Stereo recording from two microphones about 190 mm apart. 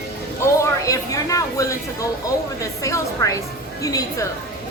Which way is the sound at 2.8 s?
15° left (ahead or behind).